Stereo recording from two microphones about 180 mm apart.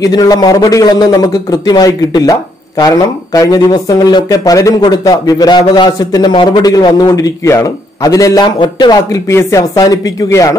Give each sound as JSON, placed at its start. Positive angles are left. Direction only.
{"t": 0.0, "sound": "speech", "side_deg": 20}